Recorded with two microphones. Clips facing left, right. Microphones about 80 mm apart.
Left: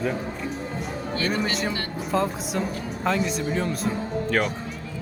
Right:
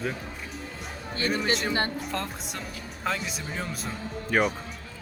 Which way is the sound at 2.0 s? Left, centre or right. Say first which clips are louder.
Left 8 dB; centre.